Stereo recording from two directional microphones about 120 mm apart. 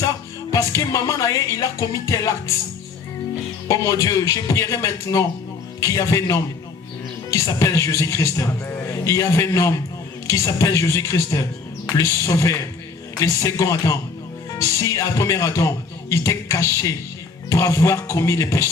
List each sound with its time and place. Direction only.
0.0 s speech: 30° left (ahead or behind)
3.7 s a man's voice: 25° left (ahead or behind)